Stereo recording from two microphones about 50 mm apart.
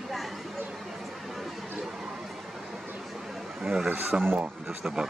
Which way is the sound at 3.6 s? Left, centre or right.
Centre.